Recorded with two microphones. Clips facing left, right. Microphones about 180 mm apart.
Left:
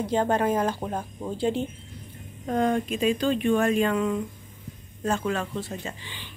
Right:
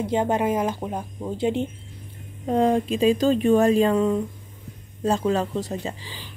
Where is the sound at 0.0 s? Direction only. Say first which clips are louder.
Right 1 dB; 20° right (ahead or behind).